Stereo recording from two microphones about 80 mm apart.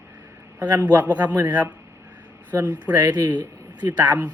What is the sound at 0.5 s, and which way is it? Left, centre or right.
Speech, right.